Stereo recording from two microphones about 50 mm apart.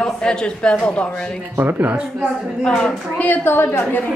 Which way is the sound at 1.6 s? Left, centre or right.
Right.